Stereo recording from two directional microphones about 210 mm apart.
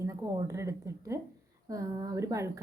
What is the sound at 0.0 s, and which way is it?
A woman's voice, 15° right (ahead or behind).